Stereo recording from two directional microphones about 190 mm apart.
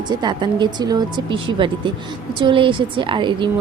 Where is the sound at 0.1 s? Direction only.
25° right (ahead or behind).